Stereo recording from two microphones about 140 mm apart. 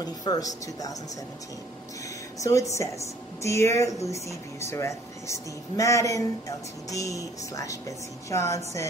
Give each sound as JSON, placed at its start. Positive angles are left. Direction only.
{"t": 0.0, "sound": "speech", "side_deg": 25}
{"t": 2.4, "sound": "speech", "side_deg": 25}